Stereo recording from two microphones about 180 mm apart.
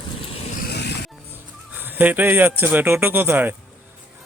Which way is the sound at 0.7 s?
65° left (ahead or behind).